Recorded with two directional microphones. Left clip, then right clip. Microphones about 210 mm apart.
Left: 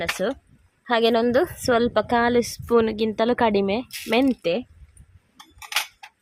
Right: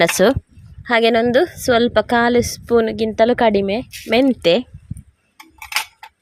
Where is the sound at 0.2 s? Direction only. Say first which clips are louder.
Right 12 dB; 50° right (ahead or behind).